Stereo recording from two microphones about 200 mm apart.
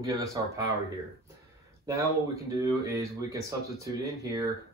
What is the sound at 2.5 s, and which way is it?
Speech, 15° right (ahead or behind).